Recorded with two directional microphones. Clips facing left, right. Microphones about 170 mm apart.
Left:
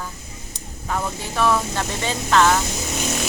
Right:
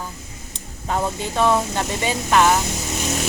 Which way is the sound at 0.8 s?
25° right (ahead or behind).